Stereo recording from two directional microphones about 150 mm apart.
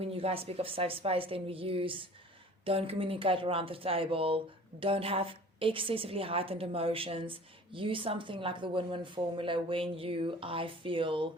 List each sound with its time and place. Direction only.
0.0 s speech: 40° right (ahead or behind)